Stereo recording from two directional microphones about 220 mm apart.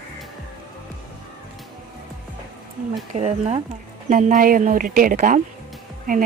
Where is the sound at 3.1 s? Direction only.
30° right (ahead or behind).